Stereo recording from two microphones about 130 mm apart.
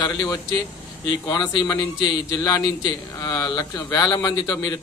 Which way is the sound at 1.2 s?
30° left (ahead or behind).